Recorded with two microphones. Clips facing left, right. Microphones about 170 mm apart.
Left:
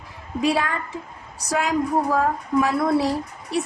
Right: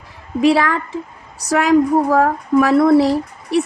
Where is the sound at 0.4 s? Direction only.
75° right (ahead or behind).